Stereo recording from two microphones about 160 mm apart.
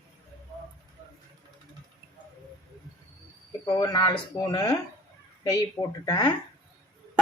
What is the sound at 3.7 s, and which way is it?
Speech, 25° left (ahead or behind).